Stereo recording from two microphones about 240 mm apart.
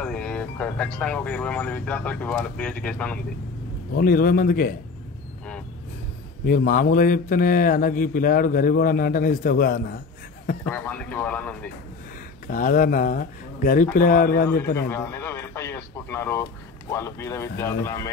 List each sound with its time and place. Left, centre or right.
0.0 s speech: centre
3.9 s a man's voice: left
6.4 s a man's voice: left
10.7 s speech: centre
12.4 s a man's voice: left
14.9 s speech: centre